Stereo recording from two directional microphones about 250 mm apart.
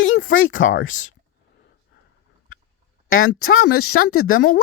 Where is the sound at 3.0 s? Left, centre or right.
Left.